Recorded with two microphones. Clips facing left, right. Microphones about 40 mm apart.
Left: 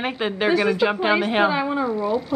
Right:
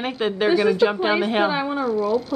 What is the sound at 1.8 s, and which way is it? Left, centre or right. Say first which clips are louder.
Speech: right 2 dB; right.